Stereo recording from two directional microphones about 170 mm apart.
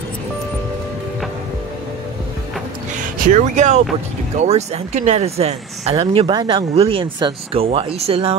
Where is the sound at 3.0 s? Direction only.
50° right (ahead or behind).